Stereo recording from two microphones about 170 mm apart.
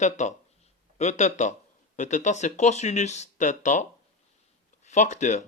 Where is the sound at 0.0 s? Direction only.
45° left (ahead or behind).